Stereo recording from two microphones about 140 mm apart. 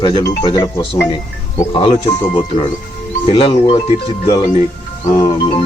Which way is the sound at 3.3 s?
40° left (ahead or behind).